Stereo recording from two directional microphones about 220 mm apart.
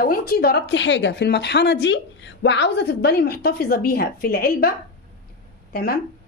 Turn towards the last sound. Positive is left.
turn(degrees=45)  # may be behind; listen again after turning